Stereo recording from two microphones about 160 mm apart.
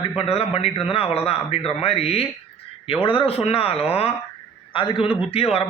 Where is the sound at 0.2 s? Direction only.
40° left (ahead or behind).